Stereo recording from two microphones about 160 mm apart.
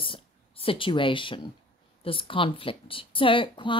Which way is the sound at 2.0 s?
35° left (ahead or behind).